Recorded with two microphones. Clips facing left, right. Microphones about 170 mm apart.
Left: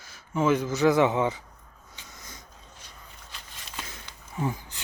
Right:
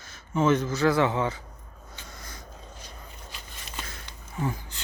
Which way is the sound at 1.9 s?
15° left (ahead or behind).